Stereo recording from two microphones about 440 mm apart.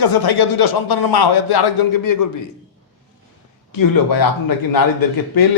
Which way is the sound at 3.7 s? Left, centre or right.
Left.